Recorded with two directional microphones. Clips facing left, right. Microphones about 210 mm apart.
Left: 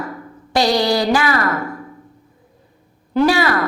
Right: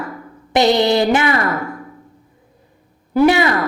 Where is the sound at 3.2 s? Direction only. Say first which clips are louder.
Right 3 dB; 20° right (ahead or behind).